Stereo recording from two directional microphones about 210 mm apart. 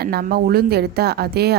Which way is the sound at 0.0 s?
45° right (ahead or behind).